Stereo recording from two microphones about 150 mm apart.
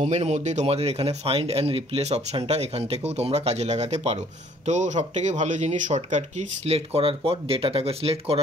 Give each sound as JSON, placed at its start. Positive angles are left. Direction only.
{"t": 0.0, "sound": "speech", "side_deg": -45}